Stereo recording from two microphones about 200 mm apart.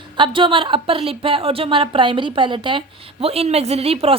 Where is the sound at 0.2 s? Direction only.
25° right (ahead or behind).